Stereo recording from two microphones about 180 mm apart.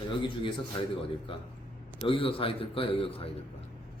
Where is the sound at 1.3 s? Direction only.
30° left (ahead or behind).